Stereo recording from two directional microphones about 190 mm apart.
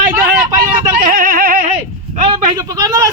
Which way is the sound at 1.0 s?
45° right (ahead or behind).